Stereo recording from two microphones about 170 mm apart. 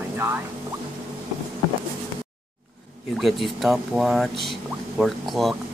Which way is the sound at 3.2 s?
Centre (ahead or behind).